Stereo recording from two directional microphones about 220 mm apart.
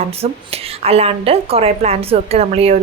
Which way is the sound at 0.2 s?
25° right (ahead or behind).